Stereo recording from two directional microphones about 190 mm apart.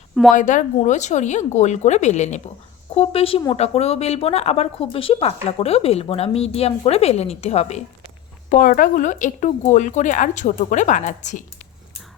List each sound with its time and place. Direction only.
0.3 s speech: 40° left (ahead or behind)
8.4 s speech: 45° left (ahead or behind)